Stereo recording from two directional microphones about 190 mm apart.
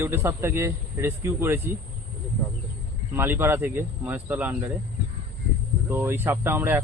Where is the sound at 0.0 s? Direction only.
15° right (ahead or behind).